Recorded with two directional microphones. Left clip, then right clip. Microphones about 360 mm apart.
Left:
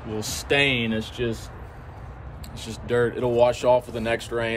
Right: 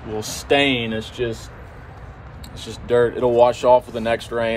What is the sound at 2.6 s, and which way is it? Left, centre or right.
Speech, centre.